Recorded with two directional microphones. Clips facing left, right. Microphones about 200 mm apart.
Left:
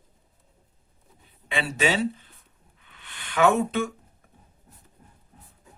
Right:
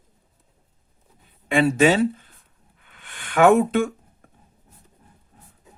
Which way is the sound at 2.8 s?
50° right (ahead or behind).